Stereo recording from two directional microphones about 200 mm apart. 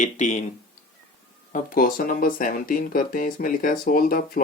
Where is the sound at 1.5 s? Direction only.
40° left (ahead or behind).